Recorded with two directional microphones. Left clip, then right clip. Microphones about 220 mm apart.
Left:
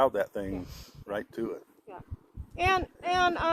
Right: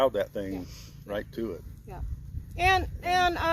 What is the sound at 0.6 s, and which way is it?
Speech, 35° left (ahead or behind).